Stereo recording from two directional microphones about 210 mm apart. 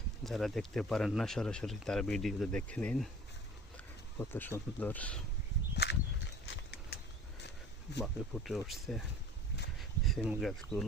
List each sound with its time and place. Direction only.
0.3 s speech: centre (ahead or behind)
4.2 s speech: 10° left (ahead or behind)
5.7 s a sound: 50° left (ahead or behind)
6.4 s horse: 50° left (ahead or behind)
7.9 s speech: centre (ahead or behind)
10.1 s speech: centre (ahead or behind)